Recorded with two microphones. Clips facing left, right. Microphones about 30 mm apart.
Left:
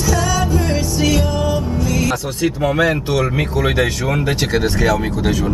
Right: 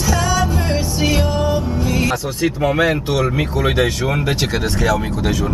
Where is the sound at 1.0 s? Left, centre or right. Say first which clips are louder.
Even; right.